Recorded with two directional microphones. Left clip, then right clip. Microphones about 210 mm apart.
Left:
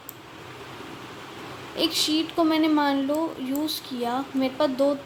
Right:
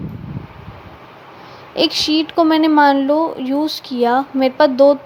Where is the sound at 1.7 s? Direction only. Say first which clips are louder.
Right 8 dB; 35° right (ahead or behind).